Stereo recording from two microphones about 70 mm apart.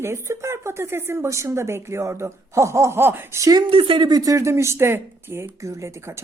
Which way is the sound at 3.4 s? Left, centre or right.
Right.